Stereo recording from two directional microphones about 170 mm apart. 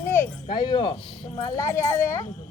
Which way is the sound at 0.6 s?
25° left (ahead or behind).